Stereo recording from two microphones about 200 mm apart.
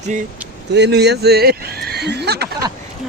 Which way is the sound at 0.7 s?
55° right (ahead or behind).